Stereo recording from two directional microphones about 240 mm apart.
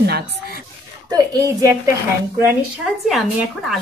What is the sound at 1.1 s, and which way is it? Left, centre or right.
Speech, centre.